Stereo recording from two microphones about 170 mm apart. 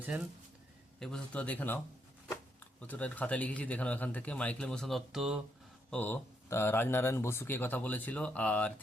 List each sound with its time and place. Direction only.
0.1 s speech: 10° right (ahead or behind)
0.9 s speech: 5° left (ahead or behind)
2.8 s speech: 10° left (ahead or behind)
5.9 s speech: 10° left (ahead or behind)